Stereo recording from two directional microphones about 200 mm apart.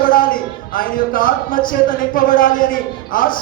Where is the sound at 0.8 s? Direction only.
45° left (ahead or behind).